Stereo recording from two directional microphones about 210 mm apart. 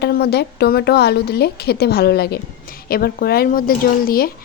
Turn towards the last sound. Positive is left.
turn(degrees=45)  # may be behind; listen again after turning